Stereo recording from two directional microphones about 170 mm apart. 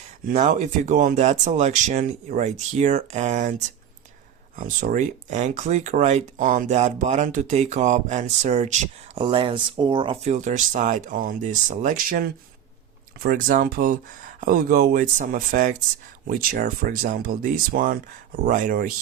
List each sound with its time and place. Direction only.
0.3 s speech: 45° right (ahead or behind)
4.5 s speech: 50° right (ahead or behind)
9.1 s speech: 30° right (ahead or behind); by 18.9 s 55° right (ahead or behind)